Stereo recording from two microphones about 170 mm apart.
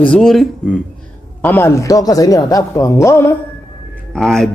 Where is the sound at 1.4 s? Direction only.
15° left (ahead or behind).